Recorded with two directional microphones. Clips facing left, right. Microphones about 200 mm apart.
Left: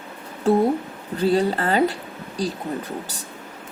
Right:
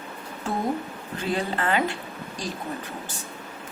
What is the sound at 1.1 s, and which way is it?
A woman's voice, 35° left (ahead or behind).